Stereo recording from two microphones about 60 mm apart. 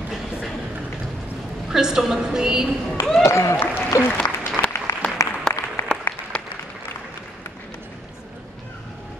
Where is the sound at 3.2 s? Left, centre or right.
Left.